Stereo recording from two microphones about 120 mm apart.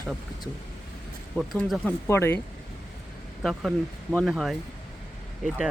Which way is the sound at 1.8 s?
20° left (ahead or behind).